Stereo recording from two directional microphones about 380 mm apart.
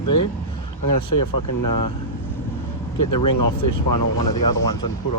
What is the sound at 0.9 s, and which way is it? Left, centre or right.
Speech, left.